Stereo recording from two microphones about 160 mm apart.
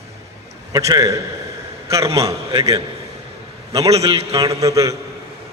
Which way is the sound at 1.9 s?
40° right (ahead or behind).